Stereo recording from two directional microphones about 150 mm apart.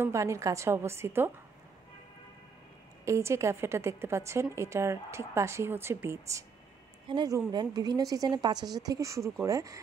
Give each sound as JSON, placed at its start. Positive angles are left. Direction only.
{"t": 0.0, "sound": "a woman's voice", "side_deg": -20}
{"t": 3.1, "sound": "a woman's voice", "side_deg": -20}